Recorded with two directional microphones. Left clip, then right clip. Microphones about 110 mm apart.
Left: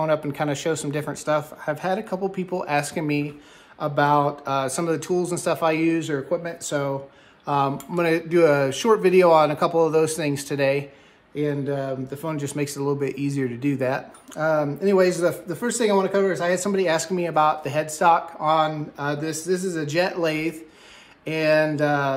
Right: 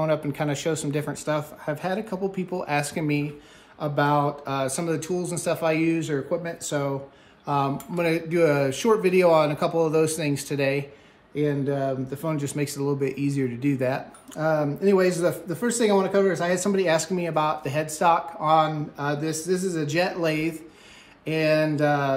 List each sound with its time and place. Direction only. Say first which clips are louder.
0.0 s speech: left 2 dB; 30° left (ahead or behind)
6.3 s speech: left 2 dB; 20° left (ahead or behind)
11.3 s speech: even; 15° left (ahead or behind)
12.4 s speech: left 2 dB; 30° left (ahead or behind)